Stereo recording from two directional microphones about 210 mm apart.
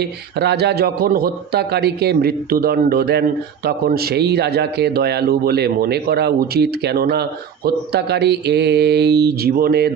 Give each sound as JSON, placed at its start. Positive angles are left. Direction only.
{"t": 0.0, "sound": "a man's voice", "side_deg": -50}